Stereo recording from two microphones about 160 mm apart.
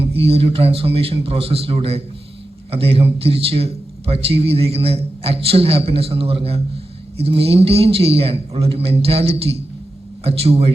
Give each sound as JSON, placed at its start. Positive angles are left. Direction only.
{"t": 0.0, "sound": "a man's voice", "side_deg": -35}